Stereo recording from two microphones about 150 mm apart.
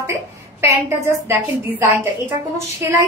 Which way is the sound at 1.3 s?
15° right (ahead or behind).